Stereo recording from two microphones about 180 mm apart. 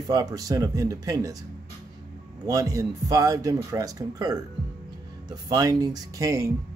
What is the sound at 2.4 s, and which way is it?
A man's voice, 20° right (ahead or behind).